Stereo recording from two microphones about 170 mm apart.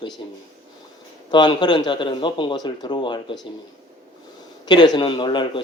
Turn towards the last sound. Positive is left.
turn(degrees=25)  # may be behind; listen again after turning